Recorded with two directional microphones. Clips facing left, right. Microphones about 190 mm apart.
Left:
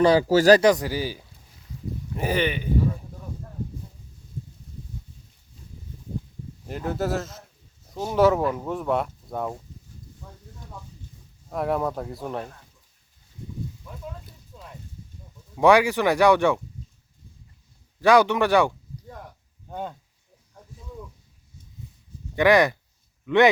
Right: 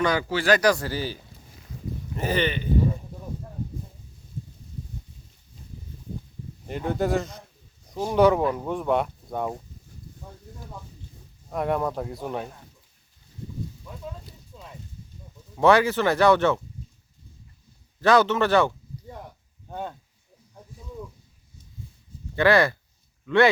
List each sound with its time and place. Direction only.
0.0 s speech: 30° left (ahead or behind)
0.6 s speech: 20° left (ahead or behind)
6.7 s speech: centre (ahead or behind)
11.5 s speech: centre (ahead or behind)
15.5 s speech: 10° left (ahead or behind)
18.0 s speech: 15° left (ahead or behind)
22.4 s speech: 15° left (ahead or behind)